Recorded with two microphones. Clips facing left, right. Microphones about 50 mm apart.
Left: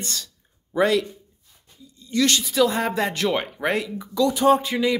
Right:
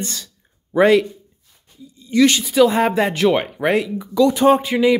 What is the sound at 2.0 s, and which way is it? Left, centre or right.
Speech, right.